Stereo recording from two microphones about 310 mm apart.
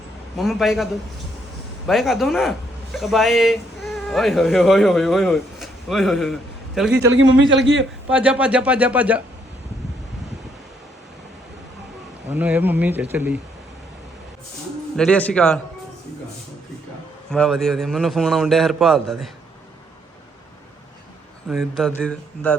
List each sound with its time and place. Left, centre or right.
0.3 s a man's voice: centre
1.9 s a man's voice: centre
7.4 s speech: right
8.1 s a man's voice: centre
12.3 s a man's voice: centre
14.9 s a man's voice: centre
17.3 s a man's voice: centre
21.5 s a man's voice: centre